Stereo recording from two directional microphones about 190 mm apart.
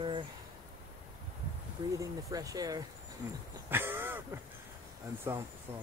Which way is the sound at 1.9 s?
15° right (ahead or behind).